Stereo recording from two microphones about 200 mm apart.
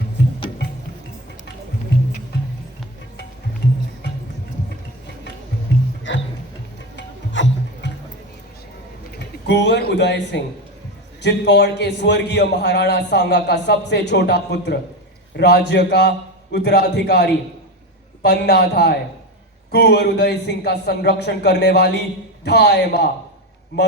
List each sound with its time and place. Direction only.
6.0 s music: 65° left (ahead or behind)
9.1 s a man's voice: 60° left (ahead or behind)